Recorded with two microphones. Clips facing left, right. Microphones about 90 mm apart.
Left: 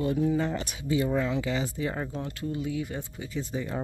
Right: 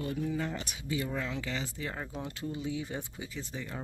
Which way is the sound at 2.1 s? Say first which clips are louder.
Left 5 dB; 15° right (ahead or behind).